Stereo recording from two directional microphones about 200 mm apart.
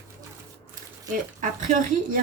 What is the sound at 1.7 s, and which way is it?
Speech, 40° right (ahead or behind).